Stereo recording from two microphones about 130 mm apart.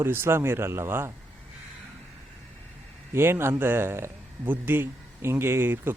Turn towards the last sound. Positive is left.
turn(degrees=-15)  # may be behind; listen again after turning